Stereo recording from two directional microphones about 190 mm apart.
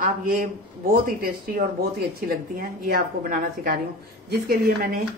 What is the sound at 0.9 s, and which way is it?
A woman's voice, 50° right (ahead or behind).